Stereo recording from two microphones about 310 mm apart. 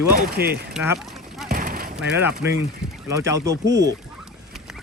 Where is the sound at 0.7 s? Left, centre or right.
Centre.